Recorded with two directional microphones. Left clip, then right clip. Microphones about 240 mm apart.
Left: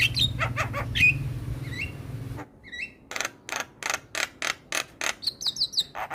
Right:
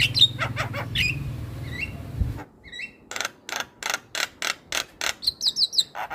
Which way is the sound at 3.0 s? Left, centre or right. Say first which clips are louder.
Right 2 dB; centre.